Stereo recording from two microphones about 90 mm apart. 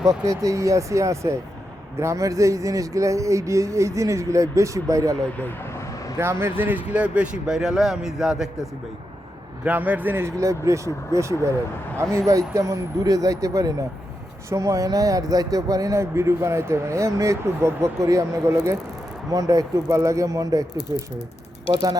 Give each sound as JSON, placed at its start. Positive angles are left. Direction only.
{"t": 0.0, "sound": "speech", "side_deg": -40}
{"t": 5.4, "sound": "speech", "side_deg": 25}
{"t": 5.9, "sound": "vehicle", "side_deg": 40}
{"t": 6.1, "sound": "speech", "side_deg": -30}
{"t": 9.6, "sound": "speech", "side_deg": -15}